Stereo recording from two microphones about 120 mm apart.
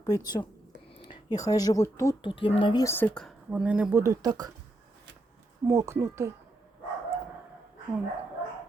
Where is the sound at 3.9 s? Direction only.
25° right (ahead or behind).